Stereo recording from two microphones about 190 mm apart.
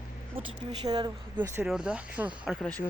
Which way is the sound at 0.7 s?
20° right (ahead or behind).